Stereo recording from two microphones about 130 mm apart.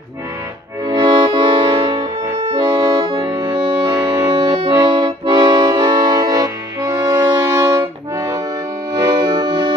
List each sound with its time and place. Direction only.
0.8 s accordion: 35° right (ahead or behind)
8.9 s music: 35° right (ahead or behind)